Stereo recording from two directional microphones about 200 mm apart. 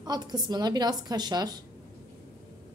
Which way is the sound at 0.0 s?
20° right (ahead or behind).